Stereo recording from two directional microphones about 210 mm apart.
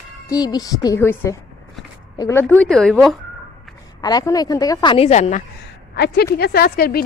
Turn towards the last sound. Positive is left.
turn(degrees=45)  # may be behind; listen again after turning